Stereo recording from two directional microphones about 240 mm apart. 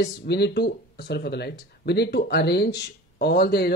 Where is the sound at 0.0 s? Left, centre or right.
Left.